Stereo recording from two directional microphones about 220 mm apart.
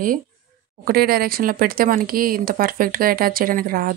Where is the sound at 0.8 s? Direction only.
45° right (ahead or behind).